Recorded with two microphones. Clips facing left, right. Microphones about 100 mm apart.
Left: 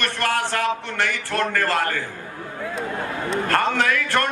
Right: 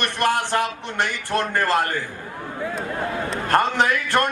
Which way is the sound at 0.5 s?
20° right (ahead or behind).